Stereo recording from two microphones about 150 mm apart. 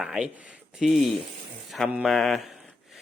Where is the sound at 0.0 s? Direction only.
5° right (ahead or behind).